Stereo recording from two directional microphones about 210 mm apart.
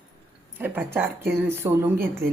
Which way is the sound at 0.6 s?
10° right (ahead or behind).